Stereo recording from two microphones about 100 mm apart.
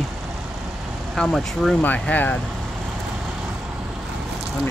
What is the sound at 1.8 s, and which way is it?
Speech, 15° left (ahead or behind).